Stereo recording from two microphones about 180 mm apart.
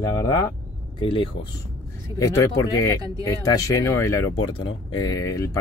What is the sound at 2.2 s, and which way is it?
Speech, 15° left (ahead or behind).